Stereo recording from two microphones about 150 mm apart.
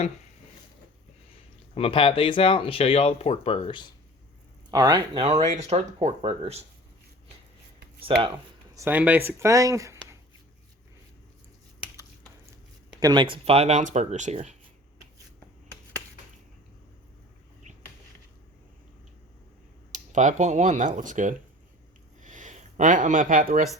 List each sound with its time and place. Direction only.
1.7 s speech: 40° left (ahead or behind)
4.7 s speech: 30° right (ahead or behind)
5.2 s speech: 45° right (ahead or behind)
8.1 s speech: 35° right (ahead or behind)
8.7 s speech: 15° right (ahead or behind)
13.0 s speech: 30° right (ahead or behind); by 14.3 s 50° right (ahead or behind)
19.9 s speech: 55° right (ahead or behind)
22.2 s a sound: 55° right (ahead or behind)